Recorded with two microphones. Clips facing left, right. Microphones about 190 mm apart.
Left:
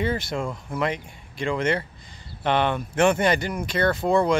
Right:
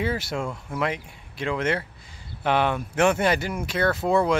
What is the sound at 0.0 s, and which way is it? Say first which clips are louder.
Speech: left 1 dB; 5° right (ahead or behind).